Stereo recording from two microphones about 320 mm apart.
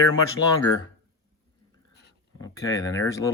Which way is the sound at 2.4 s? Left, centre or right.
Centre.